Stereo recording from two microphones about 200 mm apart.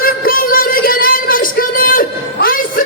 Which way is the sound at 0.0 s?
45° left (ahead or behind).